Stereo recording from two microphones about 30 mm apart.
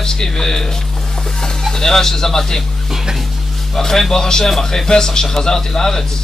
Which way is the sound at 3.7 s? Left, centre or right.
Centre.